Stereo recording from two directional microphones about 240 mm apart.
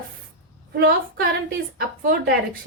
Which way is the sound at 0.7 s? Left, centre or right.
Right.